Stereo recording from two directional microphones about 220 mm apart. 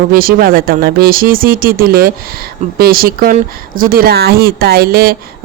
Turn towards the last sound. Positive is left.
turn(degrees=-45)  # may be behind; listen again after turning